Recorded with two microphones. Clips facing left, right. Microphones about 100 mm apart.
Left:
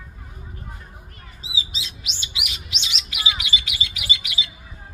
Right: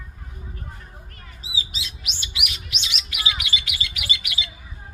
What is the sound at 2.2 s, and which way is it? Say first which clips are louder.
Bird: right 1 dB; 25° left (ahead or behind).